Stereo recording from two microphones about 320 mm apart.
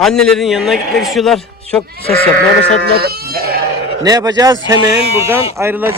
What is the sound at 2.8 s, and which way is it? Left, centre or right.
Goat, right.